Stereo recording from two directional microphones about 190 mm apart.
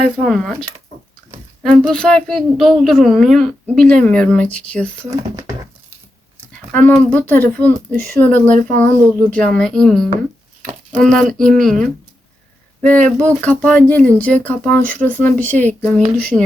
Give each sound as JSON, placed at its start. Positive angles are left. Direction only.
{"t": 0.2, "sound": "speech", "side_deg": 0}
{"t": 1.9, "sound": "speech", "side_deg": 5}
{"t": 5.1, "sound": "speech", "side_deg": -15}
{"t": 6.7, "sound": "speech", "side_deg": 5}